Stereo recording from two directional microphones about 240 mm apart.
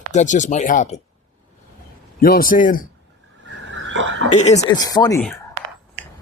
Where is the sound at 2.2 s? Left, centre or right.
Left.